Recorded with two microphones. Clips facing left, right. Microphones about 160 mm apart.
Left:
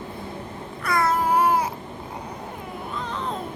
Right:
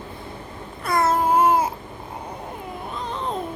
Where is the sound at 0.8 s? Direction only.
25° right (ahead or behind).